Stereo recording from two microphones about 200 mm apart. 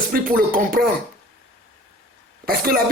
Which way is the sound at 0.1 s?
45° right (ahead or behind).